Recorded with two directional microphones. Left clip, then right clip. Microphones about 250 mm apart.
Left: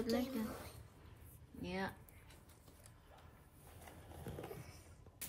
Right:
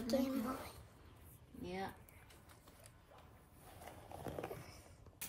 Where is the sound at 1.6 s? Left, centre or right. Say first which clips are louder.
Left 2 dB; centre.